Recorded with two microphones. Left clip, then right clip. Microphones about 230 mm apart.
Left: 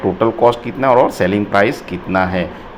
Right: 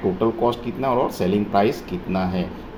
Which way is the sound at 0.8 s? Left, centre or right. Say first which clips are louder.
Left 10 dB; centre.